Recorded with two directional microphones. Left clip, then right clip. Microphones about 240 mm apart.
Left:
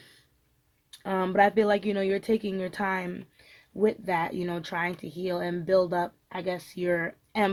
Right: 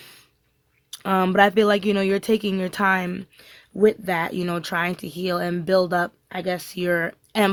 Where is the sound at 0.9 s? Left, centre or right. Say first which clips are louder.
Right 8 dB; right.